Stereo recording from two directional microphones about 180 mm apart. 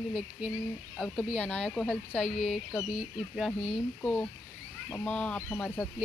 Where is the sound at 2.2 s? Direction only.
40° left (ahead or behind).